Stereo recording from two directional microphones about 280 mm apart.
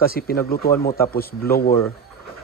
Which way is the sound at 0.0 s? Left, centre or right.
Left.